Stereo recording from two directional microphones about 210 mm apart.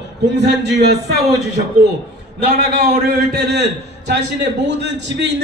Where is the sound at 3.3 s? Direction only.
55° right (ahead or behind).